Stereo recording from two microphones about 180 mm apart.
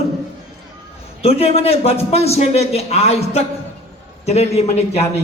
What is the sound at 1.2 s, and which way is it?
A man's voice, 35° left (ahead or behind).